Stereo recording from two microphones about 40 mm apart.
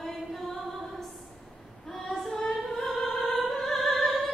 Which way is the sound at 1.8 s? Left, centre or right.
Centre.